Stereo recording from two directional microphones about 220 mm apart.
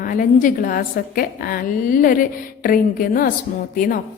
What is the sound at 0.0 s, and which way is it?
A woman's voice, 40° left (ahead or behind).